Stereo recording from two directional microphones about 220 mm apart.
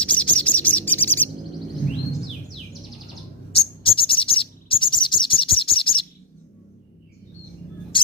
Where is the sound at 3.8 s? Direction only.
25° left (ahead or behind).